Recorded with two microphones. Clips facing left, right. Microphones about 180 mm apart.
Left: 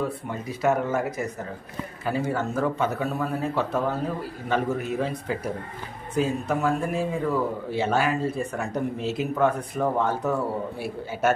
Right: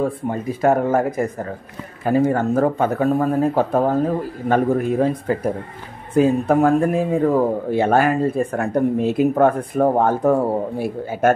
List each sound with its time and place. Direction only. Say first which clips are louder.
0.0 s a man's voice: right 7 dB; 50° right (ahead or behind)